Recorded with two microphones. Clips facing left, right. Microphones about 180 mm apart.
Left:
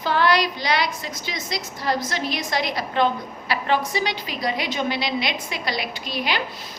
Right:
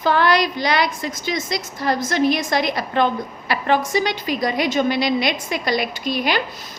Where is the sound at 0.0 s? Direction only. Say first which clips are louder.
Right 3 dB; 50° right (ahead or behind).